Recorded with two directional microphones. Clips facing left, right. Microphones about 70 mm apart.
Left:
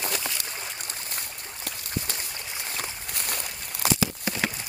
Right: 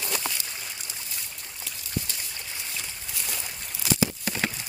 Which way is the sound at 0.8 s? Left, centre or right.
Left.